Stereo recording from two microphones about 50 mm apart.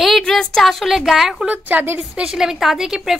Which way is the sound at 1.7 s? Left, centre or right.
Right.